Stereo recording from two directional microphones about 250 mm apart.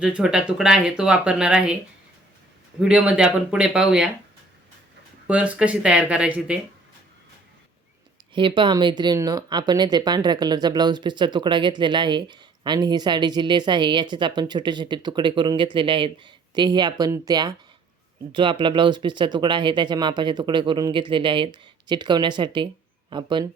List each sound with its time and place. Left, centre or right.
0.0 s speech: centre
2.8 s speech: centre
5.3 s speech: centre
8.3 s speech: centre